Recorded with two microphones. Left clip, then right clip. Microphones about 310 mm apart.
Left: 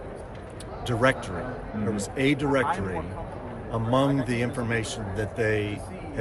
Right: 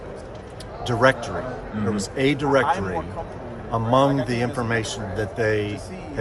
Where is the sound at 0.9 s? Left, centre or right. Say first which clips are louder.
Right 5 dB; centre.